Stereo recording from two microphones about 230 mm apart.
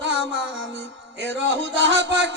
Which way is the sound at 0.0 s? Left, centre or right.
Right.